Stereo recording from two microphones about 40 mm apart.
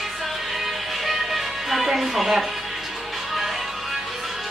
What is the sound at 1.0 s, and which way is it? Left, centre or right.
Music, centre.